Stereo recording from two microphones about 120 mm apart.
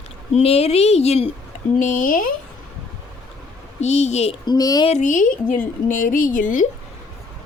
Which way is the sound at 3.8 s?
70° left (ahead or behind).